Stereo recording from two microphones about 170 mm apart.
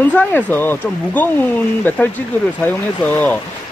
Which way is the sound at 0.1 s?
10° left (ahead or behind).